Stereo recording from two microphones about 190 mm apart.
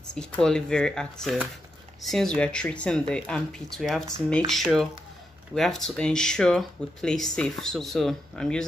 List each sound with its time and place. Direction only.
0.1 s speech: 5° left (ahead or behind)